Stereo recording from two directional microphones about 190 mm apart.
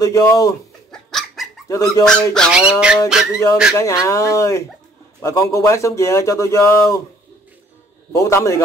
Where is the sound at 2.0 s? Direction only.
5° left (ahead or behind).